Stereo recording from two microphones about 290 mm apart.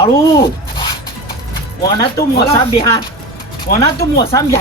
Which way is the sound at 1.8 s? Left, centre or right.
Centre.